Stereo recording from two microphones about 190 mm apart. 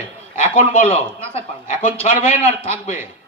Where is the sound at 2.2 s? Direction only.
35° left (ahead or behind).